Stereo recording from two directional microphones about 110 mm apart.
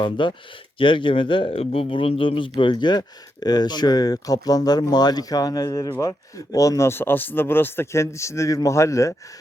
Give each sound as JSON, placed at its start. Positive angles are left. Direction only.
{"t": 0.0, "sound": "speech", "side_deg": 45}